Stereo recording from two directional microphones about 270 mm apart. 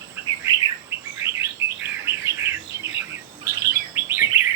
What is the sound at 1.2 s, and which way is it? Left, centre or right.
Bird, centre.